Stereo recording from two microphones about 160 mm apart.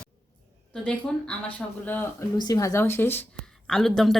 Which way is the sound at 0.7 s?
5° left (ahead or behind).